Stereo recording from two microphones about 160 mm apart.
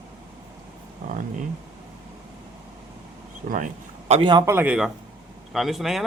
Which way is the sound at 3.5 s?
50° right (ahead or behind).